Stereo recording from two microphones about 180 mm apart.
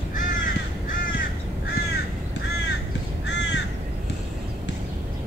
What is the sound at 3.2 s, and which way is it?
Crow, 80° left.